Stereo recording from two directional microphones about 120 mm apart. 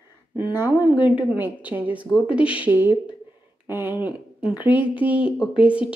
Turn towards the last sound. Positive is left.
turn(degrees=-10)  # may be behind; listen again after turning